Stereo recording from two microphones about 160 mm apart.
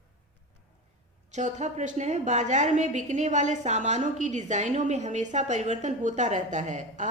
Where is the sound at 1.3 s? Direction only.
45° right (ahead or behind).